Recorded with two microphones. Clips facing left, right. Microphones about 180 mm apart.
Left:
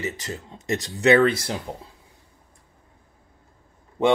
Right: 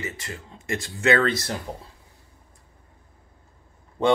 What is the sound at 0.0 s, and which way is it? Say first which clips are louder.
Speech: left 4 dB; 20° left (ahead or behind).